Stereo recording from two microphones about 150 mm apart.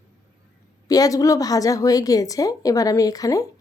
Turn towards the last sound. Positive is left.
turn(degrees=25)  # may be behind; listen again after turning